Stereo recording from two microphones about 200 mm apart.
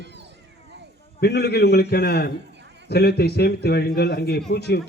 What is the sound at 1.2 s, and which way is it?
A man's voice, 55° left (ahead or behind).